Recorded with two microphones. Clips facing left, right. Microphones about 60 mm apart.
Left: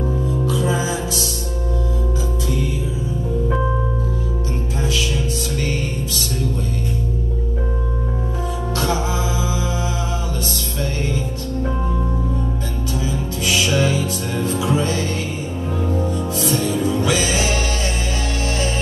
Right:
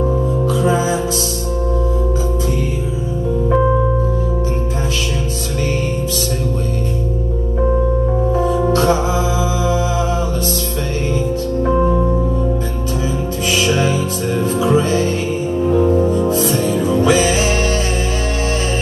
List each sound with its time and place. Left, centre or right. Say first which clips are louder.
0.5 s music: right 5 dB; right
13.5 s music: right 2 dB; right